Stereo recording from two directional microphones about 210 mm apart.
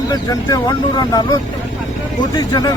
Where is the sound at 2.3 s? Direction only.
15° left (ahead or behind).